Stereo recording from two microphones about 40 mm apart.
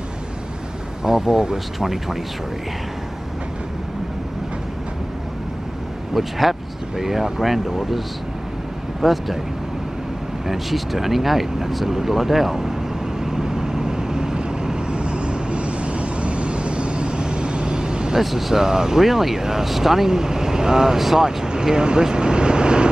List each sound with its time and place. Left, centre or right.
1.0 s speech: centre
6.1 s speech: centre
9.0 s speech: centre
10.4 s speech: centre
13.2 s vehicle: centre
18.2 s speech: centre